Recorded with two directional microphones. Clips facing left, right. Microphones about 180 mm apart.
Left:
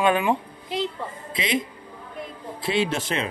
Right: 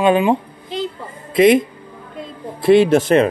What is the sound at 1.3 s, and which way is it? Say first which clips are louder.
Speech: right 17 dB; 55° right (ahead or behind).